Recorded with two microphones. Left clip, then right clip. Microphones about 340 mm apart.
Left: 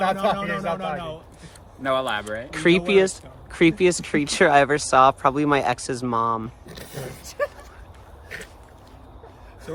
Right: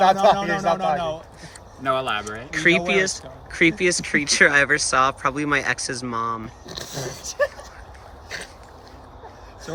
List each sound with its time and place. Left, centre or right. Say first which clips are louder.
0.0 s speech: right 6 dB; centre
1.8 s speech: right 1 dB; left
2.5 s speech: even; centre
6.7 s dog: right 5 dB; centre